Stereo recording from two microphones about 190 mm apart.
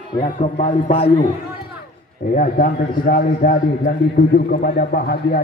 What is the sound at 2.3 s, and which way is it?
A man's voice, 50° left (ahead or behind).